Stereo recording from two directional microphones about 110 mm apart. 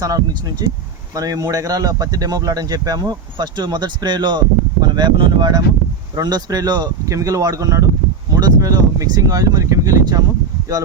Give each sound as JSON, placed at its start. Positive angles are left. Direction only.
{"t": 0.0, "sound": "speech", "side_deg": -35}